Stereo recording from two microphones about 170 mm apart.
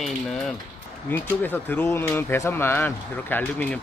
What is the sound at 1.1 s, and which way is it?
Speech, 10° left (ahead or behind).